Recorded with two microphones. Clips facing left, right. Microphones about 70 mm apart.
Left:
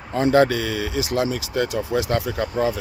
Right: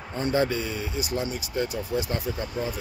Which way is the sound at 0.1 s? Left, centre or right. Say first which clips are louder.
Left 8 dB; left.